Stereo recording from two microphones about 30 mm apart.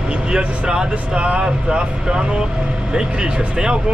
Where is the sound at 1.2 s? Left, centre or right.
Right.